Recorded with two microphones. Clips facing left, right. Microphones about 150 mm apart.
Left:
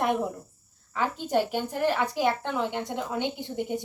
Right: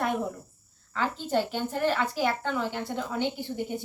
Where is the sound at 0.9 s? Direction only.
15° left (ahead or behind).